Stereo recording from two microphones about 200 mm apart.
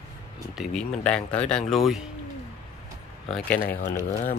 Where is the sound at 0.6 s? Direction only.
5° left (ahead or behind).